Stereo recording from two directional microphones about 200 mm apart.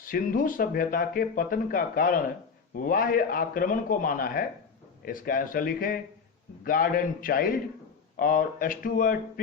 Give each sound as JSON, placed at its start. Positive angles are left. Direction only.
{"t": 0.1, "sound": "speech", "side_deg": 45}